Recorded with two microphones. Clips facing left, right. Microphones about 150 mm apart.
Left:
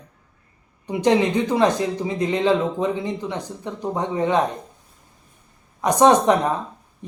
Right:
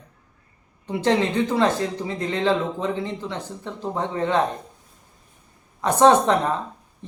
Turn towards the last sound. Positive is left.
turn(degrees=15)  # may be behind; listen again after turning